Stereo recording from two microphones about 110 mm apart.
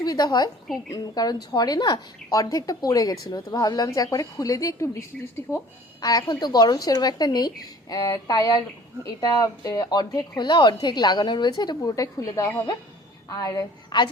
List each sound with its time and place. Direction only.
0.0 s a woman's voice: 35° left (ahead or behind)
5.5 s speech: 5° right (ahead or behind)
6.0 s speech: 35° left (ahead or behind)